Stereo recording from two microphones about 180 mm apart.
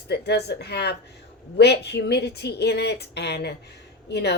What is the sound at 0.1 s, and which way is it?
A woman's voice, 65° left (ahead or behind).